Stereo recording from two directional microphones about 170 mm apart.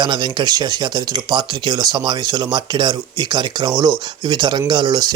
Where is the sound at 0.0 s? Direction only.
25° right (ahead or behind).